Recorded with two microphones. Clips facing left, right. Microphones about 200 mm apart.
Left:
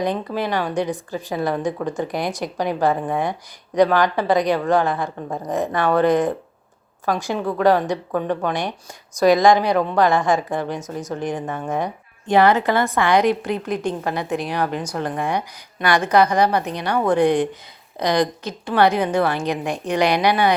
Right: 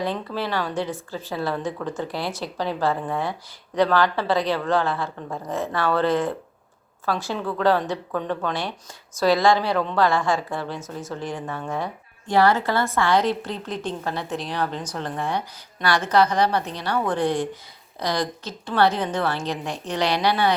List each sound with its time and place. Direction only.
0.0 s a woman's voice: 15° left (ahead or behind)